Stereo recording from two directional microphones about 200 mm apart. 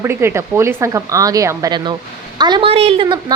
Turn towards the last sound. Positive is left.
turn(degrees=-25)  # may be behind; listen again after turning